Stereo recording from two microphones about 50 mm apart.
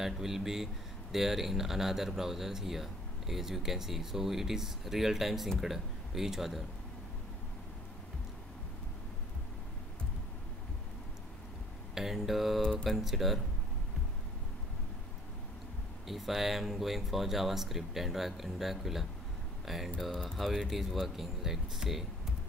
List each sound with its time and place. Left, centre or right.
0.0 s speech: centre
11.9 s speech: centre
16.1 s speech: centre
20.1 s speech: centre